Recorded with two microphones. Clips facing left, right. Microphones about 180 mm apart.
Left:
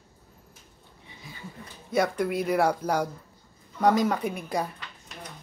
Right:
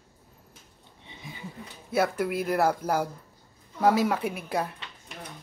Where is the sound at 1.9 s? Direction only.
5° right (ahead or behind).